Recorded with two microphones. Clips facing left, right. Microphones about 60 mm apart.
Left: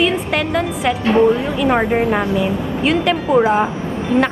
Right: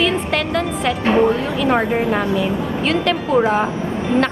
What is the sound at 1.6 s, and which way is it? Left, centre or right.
Speech, centre.